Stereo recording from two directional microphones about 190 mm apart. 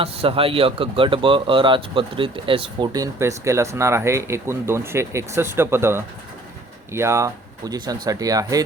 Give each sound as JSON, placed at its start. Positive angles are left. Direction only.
{"t": 0.0, "sound": "speech", "side_deg": -30}